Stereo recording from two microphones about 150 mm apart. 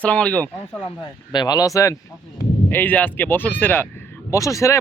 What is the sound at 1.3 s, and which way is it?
Speech, 25° left (ahead or behind).